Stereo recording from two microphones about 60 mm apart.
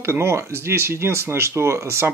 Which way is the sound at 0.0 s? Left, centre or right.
Right.